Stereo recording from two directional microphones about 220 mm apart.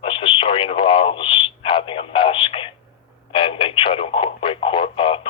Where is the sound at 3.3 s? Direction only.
25° left (ahead or behind).